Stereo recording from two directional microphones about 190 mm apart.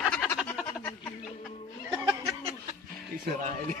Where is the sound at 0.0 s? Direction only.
5° right (ahead or behind).